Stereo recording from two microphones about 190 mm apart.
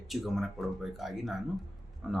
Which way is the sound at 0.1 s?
Centre (ahead or behind).